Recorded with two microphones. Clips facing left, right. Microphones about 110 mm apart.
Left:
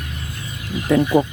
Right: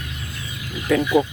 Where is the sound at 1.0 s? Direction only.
40° left (ahead or behind).